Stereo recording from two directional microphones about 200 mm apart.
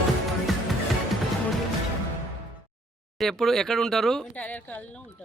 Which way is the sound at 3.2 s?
Centre (ahead or behind).